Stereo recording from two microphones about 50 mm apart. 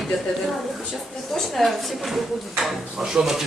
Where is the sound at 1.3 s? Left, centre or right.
Centre.